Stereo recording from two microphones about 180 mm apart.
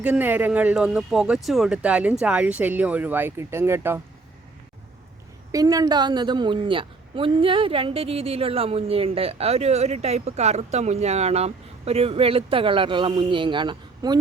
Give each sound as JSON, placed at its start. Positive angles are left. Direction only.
{"t": 0.0, "sound": "speech", "side_deg": -10}
{"t": 5.5, "sound": "a woman's voice", "side_deg": -20}